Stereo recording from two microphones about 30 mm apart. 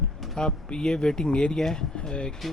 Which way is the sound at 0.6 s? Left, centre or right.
Left.